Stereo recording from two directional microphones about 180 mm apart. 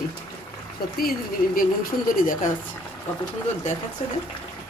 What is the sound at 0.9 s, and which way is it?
Speech, 55° left (ahead or behind).